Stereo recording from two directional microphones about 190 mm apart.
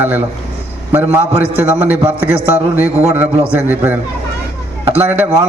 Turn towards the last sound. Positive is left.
turn(degrees=-10)  # may be behind; listen again after turning